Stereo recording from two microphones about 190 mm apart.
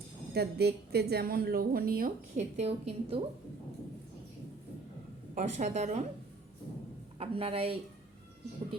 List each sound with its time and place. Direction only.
0.3 s a woman's voice: 55° right (ahead or behind)
2.6 s a woman's voice: 30° right (ahead or behind)
5.3 s a woman's voice: 40° right (ahead or behind)
7.2 s a woman's voice: 30° right (ahead or behind)